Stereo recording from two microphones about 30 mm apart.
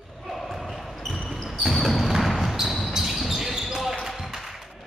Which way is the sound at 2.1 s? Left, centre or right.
Centre.